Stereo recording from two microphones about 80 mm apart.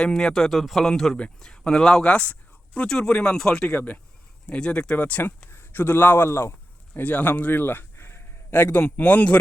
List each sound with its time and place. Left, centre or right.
0.0 s a man's voice: centre
3.8 s a man's voice: left
6.9 s a man's voice: left